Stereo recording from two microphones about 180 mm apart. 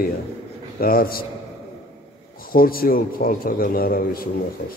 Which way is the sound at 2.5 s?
55° left (ahead or behind).